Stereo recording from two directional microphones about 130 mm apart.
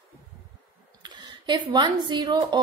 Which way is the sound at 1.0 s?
35° right (ahead or behind).